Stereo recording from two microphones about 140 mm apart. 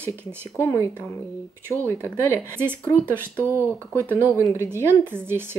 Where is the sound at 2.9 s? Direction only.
15° right (ahead or behind).